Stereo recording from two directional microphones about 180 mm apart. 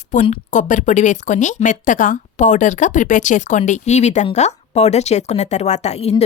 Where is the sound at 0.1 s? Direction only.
45° left (ahead or behind).